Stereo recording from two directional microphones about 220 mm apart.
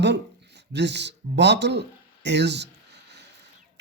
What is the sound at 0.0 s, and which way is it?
A man's voice, 50° right (ahead or behind).